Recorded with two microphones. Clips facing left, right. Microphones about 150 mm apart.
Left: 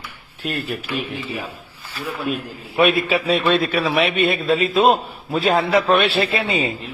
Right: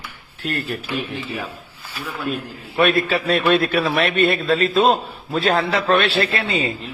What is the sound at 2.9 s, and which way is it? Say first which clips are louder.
A man's voice: even; 5° left (ahead or behind).